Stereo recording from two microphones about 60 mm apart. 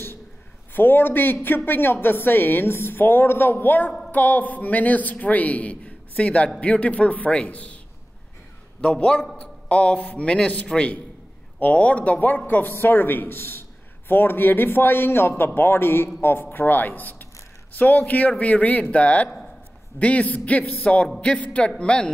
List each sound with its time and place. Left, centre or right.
0.7 s a man's voice: left
8.8 s a man's voice: centre